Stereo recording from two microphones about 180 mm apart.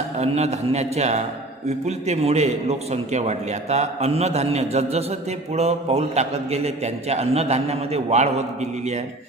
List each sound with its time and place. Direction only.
0.2 s a man's voice: 35° right (ahead or behind)